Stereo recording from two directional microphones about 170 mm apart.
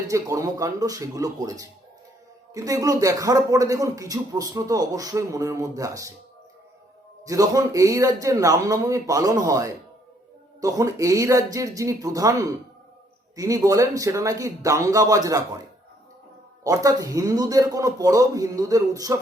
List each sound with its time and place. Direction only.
0.1 s a man's voice: 20° right (ahead or behind)
7.3 s a man's voice: 20° right (ahead or behind)
16.6 s a man's voice: 20° right (ahead or behind)